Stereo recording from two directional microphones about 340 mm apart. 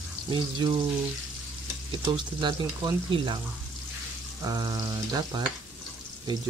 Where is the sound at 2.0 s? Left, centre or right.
Centre.